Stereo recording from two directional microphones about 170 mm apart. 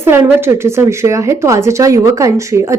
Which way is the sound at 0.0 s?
15° right (ahead or behind).